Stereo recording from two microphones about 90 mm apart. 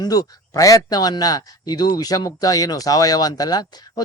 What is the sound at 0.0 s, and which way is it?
Speech, 45° left (ahead or behind).